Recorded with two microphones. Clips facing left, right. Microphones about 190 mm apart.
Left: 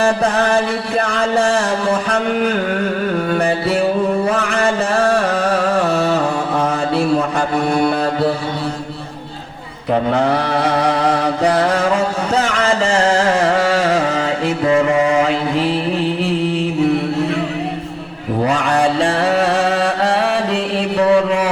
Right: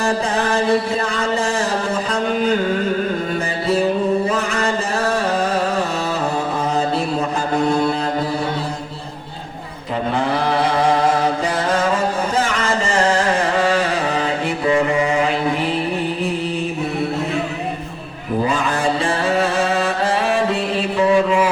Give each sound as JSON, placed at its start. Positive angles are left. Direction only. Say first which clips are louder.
{"t": 3.3, "sound": "music", "louder": "left 4 dB", "side_deg": 65}
{"t": 4.3, "sound": "a sound", "louder": "left 3 dB", "side_deg": 65}
{"t": 9.9, "sound": "mantra", "louder": "left 5 dB", "side_deg": 65}
{"t": 18.4, "sound": "music", "louder": "left 5 dB", "side_deg": 75}